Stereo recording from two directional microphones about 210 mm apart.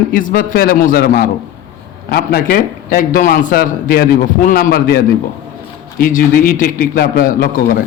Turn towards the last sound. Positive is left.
turn(degrees=40)  # may be behind; listen again after turning